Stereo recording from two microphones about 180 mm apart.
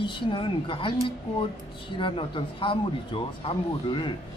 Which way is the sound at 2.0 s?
30° left (ahead or behind).